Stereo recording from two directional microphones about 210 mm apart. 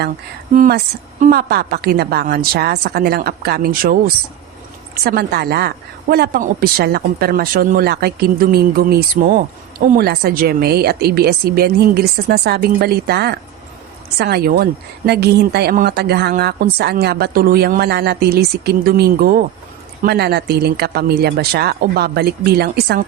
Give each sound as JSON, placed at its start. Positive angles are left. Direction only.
{"t": 0.5, "sound": "speech", "side_deg": -40}